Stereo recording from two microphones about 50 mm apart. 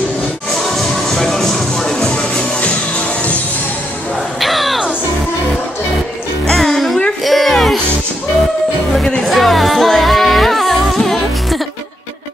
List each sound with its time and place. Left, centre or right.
0.5 s music: centre
4.4 s a sound: centre
6.4 s music: centre
8.9 s music: centre
9.2 s music: centre